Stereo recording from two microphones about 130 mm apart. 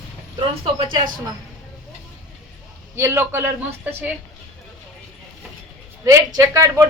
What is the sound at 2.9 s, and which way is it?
A man's voice, 20° right (ahead or behind).